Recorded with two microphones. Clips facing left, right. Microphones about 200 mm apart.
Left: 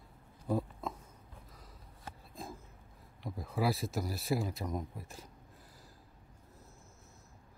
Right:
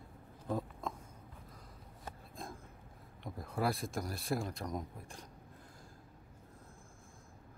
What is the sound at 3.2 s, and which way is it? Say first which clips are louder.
A man's voice: left 2 dB; centre (ahead or behind).